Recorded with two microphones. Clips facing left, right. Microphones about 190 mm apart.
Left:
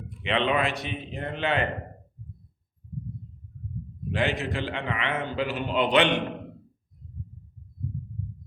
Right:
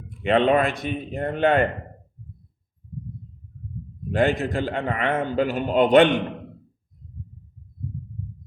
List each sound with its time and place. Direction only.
0.2 s a man's voice: 45° right (ahead or behind)
4.1 s a man's voice: 50° right (ahead or behind)